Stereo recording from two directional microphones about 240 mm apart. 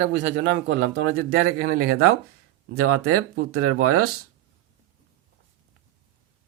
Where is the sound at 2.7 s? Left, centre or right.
Right.